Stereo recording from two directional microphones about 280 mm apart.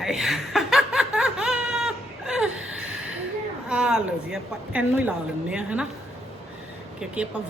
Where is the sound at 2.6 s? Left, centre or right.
Right.